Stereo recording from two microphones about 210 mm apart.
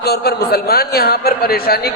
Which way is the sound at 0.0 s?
50° left (ahead or behind).